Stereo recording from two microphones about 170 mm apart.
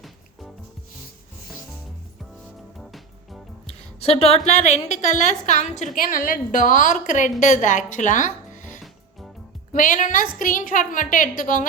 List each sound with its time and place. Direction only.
2.7 s music: centre (ahead or behind)
3.7 s music: 35° left (ahead or behind)
4.4 s a woman's voice: 40° left (ahead or behind)